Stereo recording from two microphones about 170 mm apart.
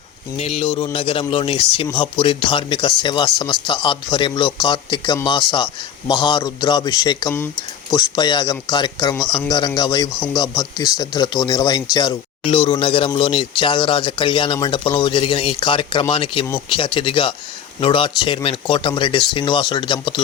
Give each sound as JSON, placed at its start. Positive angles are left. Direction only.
{"t": 0.3, "sound": "a man's voice", "side_deg": 35}